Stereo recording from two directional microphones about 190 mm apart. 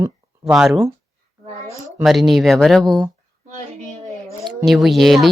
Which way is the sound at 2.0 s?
Centre (ahead or behind).